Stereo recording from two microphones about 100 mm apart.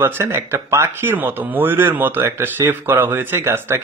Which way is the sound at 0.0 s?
25° right (ahead or behind).